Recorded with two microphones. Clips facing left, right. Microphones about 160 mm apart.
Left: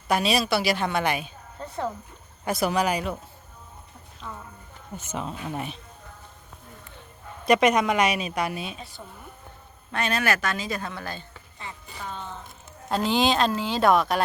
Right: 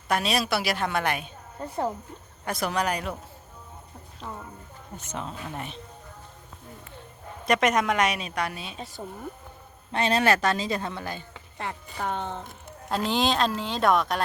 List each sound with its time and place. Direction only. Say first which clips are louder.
0.1 s speech: left 2 dB; centre (ahead or behind)
2.4 s speech: left 3 dB; 5° left (ahead or behind)
4.9 s speech: left 3 dB; 10° left (ahead or behind)
7.4 s speech: left 3 dB; centre (ahead or behind)
9.0 s speech: right 6 dB; 45° right (ahead or behind)
9.9 s speech: right 3 dB; 25° right (ahead or behind)
11.5 s speech: right 6 dB; 65° right (ahead or behind)
12.9 s speech: left 2 dB; centre (ahead or behind)